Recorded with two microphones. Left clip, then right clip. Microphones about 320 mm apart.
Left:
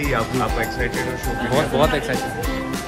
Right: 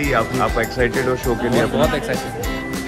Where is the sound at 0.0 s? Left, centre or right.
Centre.